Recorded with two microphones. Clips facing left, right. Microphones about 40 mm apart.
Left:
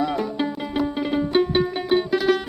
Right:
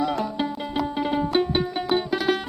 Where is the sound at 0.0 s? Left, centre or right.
Centre.